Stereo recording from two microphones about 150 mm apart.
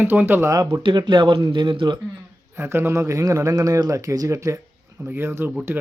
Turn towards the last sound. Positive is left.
turn(degrees=-15)  # may be behind; listen again after turning